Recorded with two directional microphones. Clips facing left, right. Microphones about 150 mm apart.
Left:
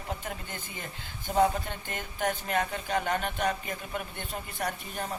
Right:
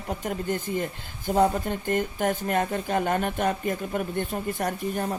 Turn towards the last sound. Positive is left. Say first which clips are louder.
# right 6 dB
turn(degrees=-45)  # may be behind; listen again after turning